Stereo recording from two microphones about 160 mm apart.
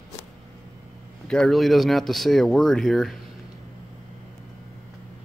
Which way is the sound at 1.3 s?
5° left (ahead or behind).